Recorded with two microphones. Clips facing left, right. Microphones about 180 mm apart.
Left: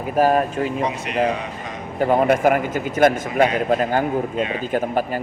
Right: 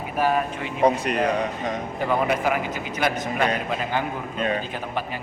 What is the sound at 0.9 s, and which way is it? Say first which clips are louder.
Speech: right 6 dB; 35° right (ahead or behind).